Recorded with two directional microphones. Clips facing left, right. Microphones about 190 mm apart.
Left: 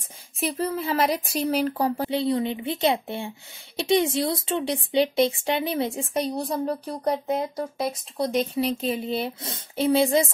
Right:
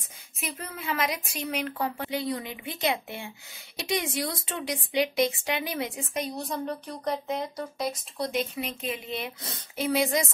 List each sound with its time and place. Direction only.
0.4 s a woman's voice: 35° left (ahead or behind)